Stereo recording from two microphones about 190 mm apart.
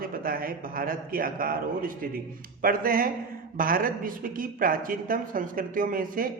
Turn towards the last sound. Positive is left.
turn(degrees=-45)  # may be behind; listen again after turning